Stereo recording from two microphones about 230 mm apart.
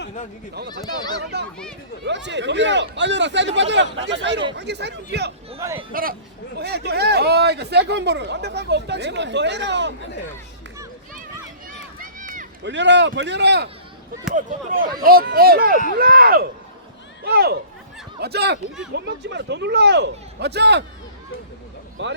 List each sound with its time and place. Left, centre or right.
0.9 s speech: centre
2.0 s speech: right
5.5 s speech: centre
5.9 s speech: right
11.9 s run: right
12.6 s speech: right
15.0 s speech: right
22.0 s speech: right